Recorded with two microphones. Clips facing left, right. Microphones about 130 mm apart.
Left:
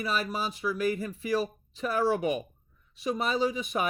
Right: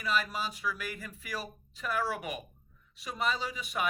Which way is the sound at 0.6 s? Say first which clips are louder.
Left 9 dB; 30° left (ahead or behind).